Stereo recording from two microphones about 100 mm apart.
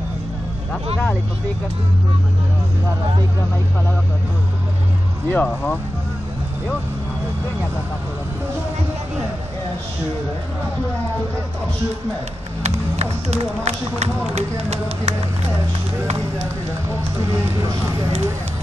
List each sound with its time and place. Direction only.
5.3 s speech: 15° left (ahead or behind)
12.6 s speech: 90° right
17.3 s speech: 35° right (ahead or behind)